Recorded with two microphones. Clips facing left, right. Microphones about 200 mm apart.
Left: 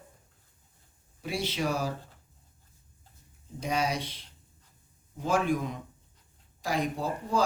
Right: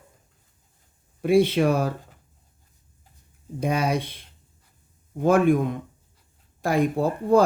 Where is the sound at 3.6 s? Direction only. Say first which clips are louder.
Right 6 dB; 55° right (ahead or behind).